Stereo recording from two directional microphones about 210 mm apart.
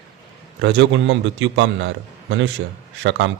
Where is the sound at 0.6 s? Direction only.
60° right (ahead or behind).